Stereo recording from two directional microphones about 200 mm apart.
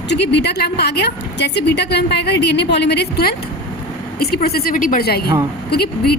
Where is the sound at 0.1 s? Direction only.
60° left (ahead or behind).